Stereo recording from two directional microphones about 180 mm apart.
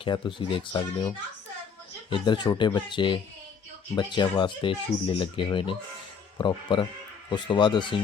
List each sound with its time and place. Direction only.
0.0 s speech: 25° left (ahead or behind)
2.0 s speech: 25° left (ahead or behind)